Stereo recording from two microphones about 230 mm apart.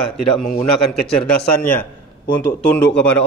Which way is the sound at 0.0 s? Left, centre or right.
Centre.